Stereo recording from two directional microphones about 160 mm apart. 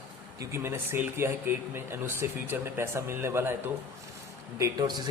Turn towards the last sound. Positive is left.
turn(degrees=-25)  # may be behind; listen again after turning